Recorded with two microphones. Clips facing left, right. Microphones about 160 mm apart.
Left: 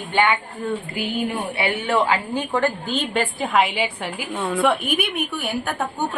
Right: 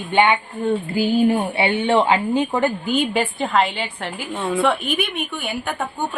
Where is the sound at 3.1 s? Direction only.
Centre (ahead or behind).